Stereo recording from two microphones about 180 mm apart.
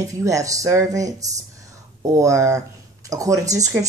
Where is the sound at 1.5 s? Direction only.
20° right (ahead or behind).